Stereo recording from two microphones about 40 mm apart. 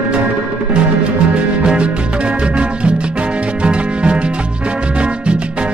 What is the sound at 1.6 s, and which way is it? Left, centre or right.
Music, right.